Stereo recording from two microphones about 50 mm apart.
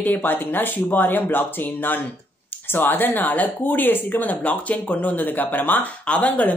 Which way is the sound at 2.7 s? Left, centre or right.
Left.